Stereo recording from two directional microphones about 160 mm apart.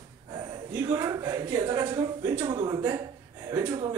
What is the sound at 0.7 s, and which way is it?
A man's voice, 20° right (ahead or behind).